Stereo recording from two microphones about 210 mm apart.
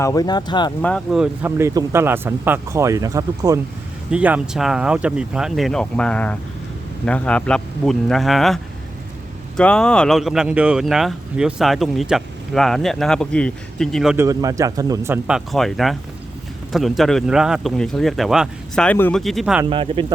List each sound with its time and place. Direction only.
0.0 s speech: 15° left (ahead or behind)
0.8 s speech: 5° left (ahead or behind)
14.2 s speech: 15° right (ahead or behind)
19.7 s speech: 25° right (ahead or behind)